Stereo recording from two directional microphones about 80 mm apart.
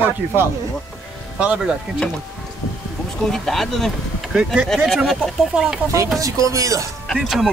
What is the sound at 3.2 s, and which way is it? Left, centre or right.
Speech, centre.